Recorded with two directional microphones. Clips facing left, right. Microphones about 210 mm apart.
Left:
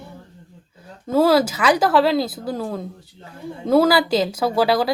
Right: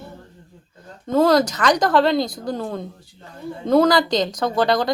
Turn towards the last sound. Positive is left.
turn(degrees=5)  # may be behind; listen again after turning